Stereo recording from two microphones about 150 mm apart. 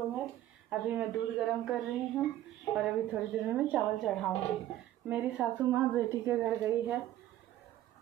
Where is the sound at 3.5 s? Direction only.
5° right (ahead or behind).